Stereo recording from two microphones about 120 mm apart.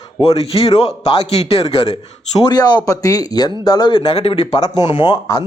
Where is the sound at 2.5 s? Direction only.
35° left (ahead or behind).